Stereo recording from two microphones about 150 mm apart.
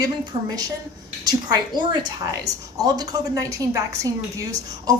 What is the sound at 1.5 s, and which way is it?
A woman's voice, 30° right (ahead or behind).